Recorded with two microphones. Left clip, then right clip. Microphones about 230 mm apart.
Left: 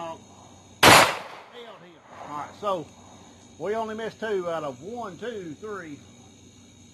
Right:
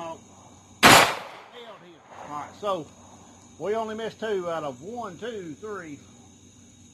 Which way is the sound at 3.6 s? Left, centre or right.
Centre.